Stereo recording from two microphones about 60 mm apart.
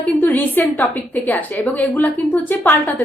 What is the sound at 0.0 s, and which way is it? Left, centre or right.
A woman's voice, left.